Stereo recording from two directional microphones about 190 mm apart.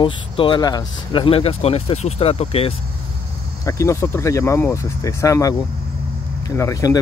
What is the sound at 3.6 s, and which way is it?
Speech, 15° left (ahead or behind).